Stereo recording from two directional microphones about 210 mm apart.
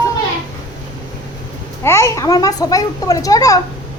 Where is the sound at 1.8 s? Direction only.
15° left (ahead or behind).